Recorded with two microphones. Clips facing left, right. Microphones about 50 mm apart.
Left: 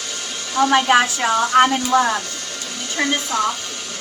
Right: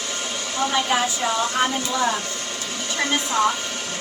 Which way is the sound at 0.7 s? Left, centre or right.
Left.